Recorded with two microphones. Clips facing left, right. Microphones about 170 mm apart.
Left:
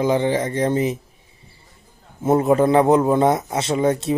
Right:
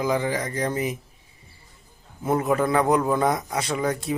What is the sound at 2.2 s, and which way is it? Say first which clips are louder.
Speech: left 6 dB; 25° left (ahead or behind).